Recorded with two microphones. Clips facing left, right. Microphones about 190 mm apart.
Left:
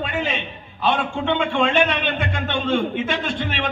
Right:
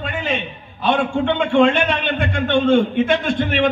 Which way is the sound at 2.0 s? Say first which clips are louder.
Right 4 dB; 55° right (ahead or behind).